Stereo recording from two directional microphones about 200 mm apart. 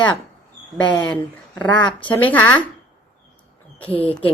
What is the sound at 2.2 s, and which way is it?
Speech, 5° left (ahead or behind).